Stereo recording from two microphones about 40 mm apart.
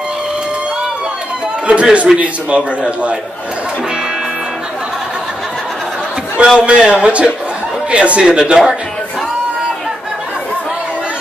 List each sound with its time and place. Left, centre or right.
1.7 s a man's voice: right
6.3 s a man's voice: right